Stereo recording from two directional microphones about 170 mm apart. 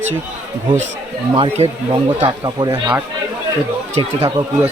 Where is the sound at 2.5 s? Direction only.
25° right (ahead or behind).